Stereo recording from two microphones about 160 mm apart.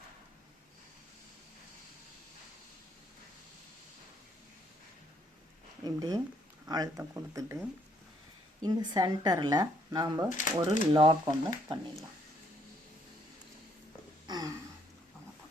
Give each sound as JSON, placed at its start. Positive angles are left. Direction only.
{"t": 5.8, "sound": "speech", "side_deg": -20}
{"t": 8.6, "sound": "speech", "side_deg": -25}
{"t": 14.3, "sound": "a sound", "side_deg": -25}